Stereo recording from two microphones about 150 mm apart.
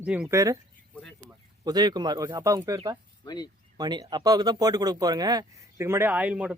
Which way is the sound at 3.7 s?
25° right (ahead or behind).